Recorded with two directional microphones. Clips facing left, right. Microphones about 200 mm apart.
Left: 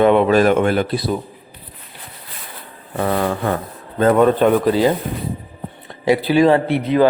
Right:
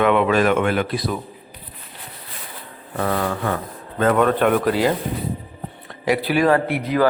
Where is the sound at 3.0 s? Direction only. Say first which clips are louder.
Left 3 dB; 25° left (ahead or behind).